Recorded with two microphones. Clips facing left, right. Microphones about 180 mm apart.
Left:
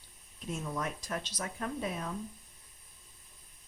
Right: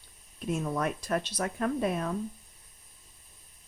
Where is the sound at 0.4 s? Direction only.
60° right (ahead or behind).